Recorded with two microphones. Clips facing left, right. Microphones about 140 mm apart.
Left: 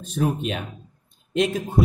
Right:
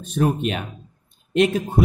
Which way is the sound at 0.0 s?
65° right (ahead or behind).